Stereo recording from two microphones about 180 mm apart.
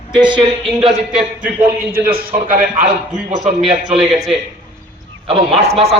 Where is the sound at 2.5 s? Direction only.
50° right (ahead or behind).